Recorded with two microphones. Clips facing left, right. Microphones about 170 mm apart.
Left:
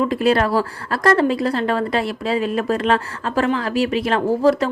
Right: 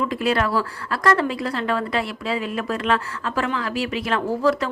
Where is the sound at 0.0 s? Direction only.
35° left (ahead or behind).